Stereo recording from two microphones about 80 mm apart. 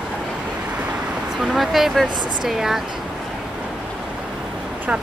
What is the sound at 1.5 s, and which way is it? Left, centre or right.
Speech, centre.